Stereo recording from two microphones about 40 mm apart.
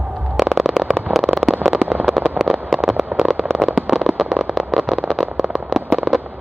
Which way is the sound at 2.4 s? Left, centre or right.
Centre.